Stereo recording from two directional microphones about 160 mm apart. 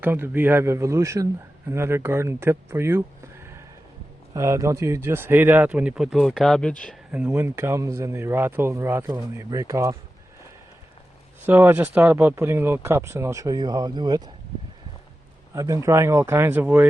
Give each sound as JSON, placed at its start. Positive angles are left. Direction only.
{"t": 0.0, "sound": "a man's voice", "side_deg": -15}
{"t": 4.4, "sound": "a man's voice", "side_deg": -20}
{"t": 7.1, "sound": "a man's voice", "side_deg": -10}
{"t": 11.4, "sound": "a man's voice", "side_deg": -10}
{"t": 15.5, "sound": "a man's voice", "side_deg": -20}